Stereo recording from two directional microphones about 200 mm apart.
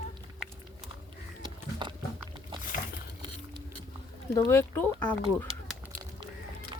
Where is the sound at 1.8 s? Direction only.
20° right (ahead or behind).